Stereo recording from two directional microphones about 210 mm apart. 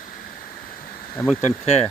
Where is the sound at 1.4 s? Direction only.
30° left (ahead or behind).